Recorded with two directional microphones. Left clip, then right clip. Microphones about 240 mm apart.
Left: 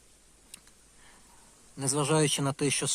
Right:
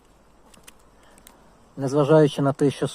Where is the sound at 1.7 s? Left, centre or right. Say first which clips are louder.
Right 10 dB; centre.